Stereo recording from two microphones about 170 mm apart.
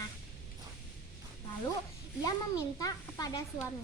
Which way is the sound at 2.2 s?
20° left (ahead or behind).